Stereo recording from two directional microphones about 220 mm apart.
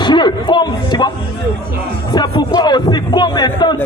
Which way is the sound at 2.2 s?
20° left (ahead or behind).